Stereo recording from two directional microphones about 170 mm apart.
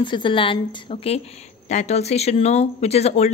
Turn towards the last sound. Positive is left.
turn(degrees=40)  # may be behind; listen again after turning